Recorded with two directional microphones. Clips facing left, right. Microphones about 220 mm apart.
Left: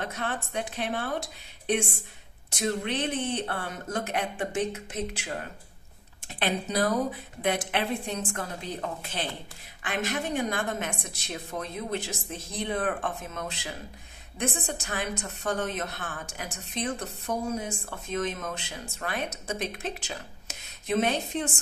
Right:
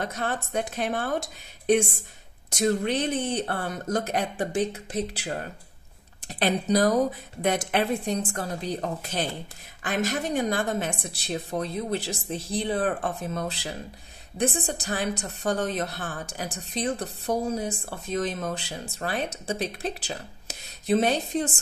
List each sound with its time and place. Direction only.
0.0 s a woman's voice: 40° right (ahead or behind)
2.5 s a woman's voice: 40° right (ahead or behind)